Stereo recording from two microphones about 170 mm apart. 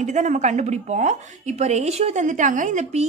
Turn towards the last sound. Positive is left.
turn(degrees=-45)  # may be behind; listen again after turning